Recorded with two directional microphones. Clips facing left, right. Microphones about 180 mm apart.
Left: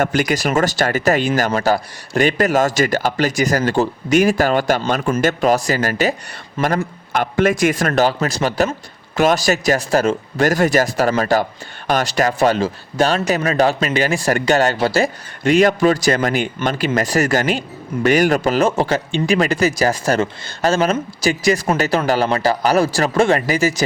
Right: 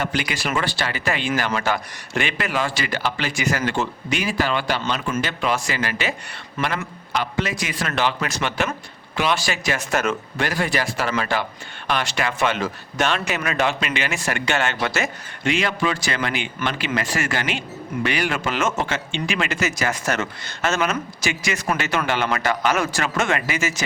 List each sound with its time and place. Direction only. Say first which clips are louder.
0.0 s speech: left 8 dB; 45° left (ahead or behind)
6.6 s a man's voice: left 6 dB; 30° left (ahead or behind)
7.1 s speech: left 8 dB; 50° left (ahead or behind); by 23.8 s 35° left (ahead or behind)